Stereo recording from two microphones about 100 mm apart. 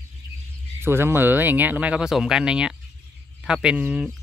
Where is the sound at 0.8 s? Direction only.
25° right (ahead or behind).